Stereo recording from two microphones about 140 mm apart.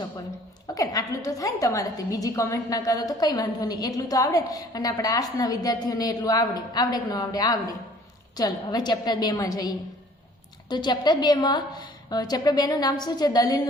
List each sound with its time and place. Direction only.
0.7 s a woman's voice: 25° left (ahead or behind)